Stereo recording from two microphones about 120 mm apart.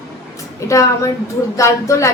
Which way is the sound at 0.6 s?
25° left (ahead or behind).